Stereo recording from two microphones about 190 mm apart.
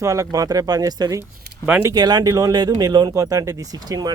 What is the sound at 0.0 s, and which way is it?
Speech, 15° right (ahead or behind).